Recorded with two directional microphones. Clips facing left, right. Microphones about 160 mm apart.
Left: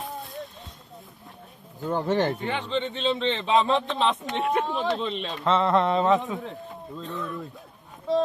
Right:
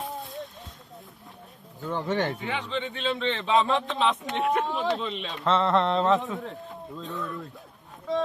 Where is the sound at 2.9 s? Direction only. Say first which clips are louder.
Left 1 dB; 25° left (ahead or behind).